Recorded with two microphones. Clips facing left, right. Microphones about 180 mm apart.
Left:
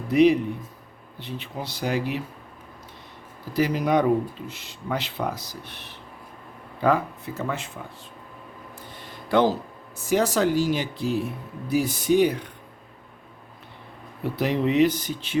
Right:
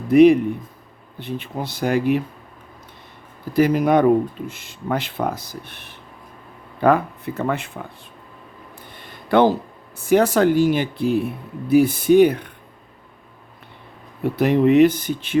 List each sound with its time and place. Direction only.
0.1 s speech: 50° right (ahead or behind)
3.5 s speech: 55° right (ahead or behind)
8.9 s a sound: 60° right (ahead or behind)
10.1 s speech: 55° right (ahead or behind)
14.3 s speech: 55° right (ahead or behind)